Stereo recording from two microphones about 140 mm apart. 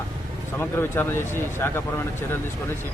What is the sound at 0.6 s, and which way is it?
Speech, 15° left (ahead or behind).